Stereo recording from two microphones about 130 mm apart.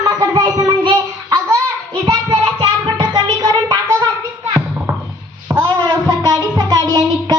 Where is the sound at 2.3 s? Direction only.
40° right (ahead or behind).